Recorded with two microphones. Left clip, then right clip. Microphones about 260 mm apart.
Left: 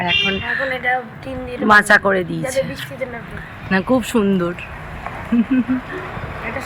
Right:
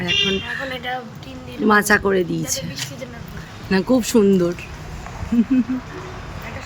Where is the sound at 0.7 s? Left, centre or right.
Left.